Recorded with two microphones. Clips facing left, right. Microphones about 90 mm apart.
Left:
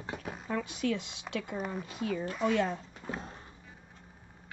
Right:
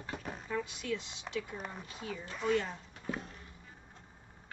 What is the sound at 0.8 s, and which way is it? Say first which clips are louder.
Speech: left 5 dB; 75° left (ahead or behind).